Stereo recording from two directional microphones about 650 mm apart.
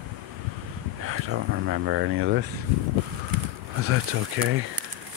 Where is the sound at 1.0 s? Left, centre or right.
Centre.